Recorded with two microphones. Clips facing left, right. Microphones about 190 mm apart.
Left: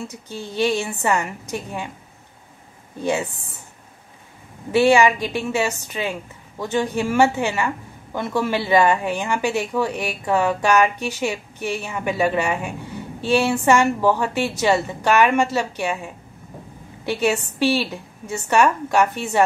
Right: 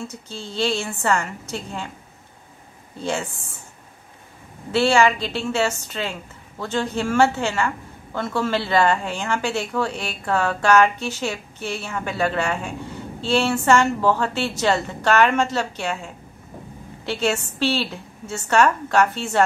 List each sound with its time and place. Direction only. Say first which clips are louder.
0.1 s a woman's voice: left 2 dB; 15° left (ahead or behind)
3.0 s a woman's voice: left 3 dB; 15° left (ahead or behind)
4.7 s a woman's voice: left 2 dB; 15° left (ahead or behind)